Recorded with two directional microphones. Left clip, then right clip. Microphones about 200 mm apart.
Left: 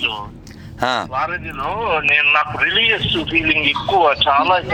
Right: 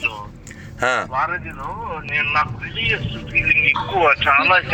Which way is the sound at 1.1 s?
40° left (ahead or behind).